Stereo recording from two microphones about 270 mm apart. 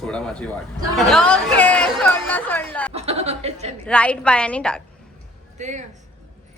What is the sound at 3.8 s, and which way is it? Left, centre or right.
Speech, centre.